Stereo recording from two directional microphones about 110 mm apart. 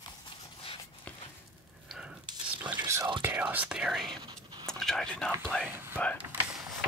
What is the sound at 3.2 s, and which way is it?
Speech, 15° right (ahead or behind).